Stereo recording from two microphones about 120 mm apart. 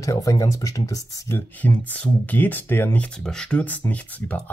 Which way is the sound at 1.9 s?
15° left (ahead or behind).